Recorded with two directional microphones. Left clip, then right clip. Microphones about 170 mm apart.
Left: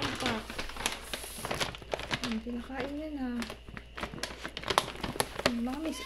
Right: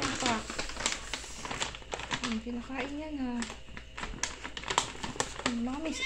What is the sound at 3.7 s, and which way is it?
Typewriter, 55° left (ahead or behind).